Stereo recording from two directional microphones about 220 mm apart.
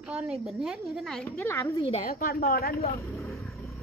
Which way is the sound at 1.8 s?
25° left (ahead or behind).